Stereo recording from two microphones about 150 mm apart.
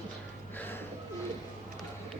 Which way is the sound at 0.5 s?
10° left (ahead or behind).